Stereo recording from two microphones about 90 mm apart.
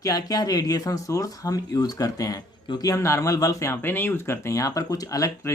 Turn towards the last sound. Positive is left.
turn(degrees=35)  # may be behind; listen again after turning